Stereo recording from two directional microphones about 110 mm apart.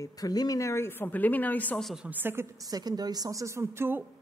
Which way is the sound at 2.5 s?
35° right (ahead or behind).